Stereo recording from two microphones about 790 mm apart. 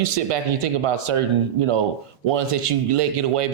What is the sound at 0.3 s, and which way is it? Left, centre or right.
Speech, right.